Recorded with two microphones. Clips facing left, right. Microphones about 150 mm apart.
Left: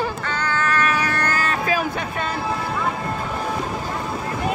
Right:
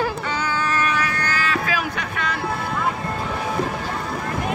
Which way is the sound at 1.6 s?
30° left (ahead or behind).